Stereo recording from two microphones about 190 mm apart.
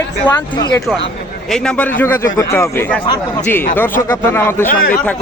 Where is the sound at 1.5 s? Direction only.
5° left (ahead or behind).